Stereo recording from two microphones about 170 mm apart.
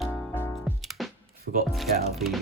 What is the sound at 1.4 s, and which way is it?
Music, 65° right (ahead or behind).